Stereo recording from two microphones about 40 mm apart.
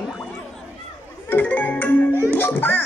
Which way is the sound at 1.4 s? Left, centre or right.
Left.